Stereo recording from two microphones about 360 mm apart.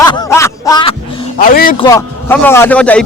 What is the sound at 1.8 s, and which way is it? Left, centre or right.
A man's voice, centre.